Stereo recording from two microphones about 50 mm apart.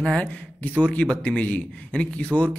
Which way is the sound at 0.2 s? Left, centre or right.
Left.